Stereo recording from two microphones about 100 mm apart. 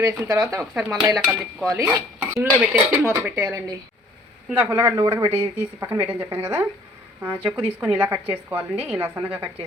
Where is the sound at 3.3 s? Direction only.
35° right (ahead or behind).